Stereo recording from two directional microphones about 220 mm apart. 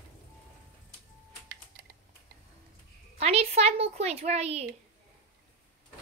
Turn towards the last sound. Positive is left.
turn(degrees=-30)  # may be behind; listen again after turning